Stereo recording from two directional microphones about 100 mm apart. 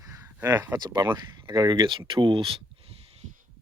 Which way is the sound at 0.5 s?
25° right (ahead or behind).